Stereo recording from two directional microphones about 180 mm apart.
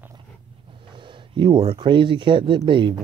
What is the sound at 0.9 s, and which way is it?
Speech, 25° right (ahead or behind).